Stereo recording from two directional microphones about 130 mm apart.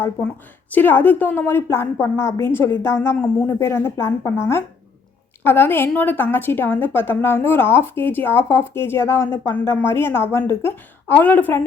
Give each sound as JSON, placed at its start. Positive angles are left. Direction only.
{"t": 0.7, "sound": "a woman's voice", "side_deg": 15}